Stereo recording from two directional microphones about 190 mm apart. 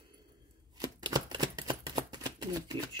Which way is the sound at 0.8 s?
20° right (ahead or behind).